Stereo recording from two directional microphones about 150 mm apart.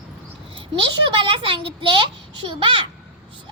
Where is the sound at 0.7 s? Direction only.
35° right (ahead or behind).